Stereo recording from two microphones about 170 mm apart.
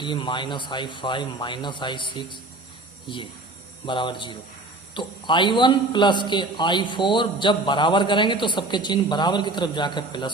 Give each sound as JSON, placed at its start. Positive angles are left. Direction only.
{"t": 0.0, "sound": "a man's voice", "side_deg": 30}